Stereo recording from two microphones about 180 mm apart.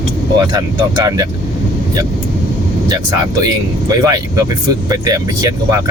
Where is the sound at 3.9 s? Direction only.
20° right (ahead or behind).